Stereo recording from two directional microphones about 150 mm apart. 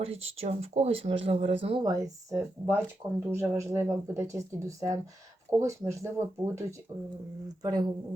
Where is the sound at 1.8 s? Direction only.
25° right (ahead or behind).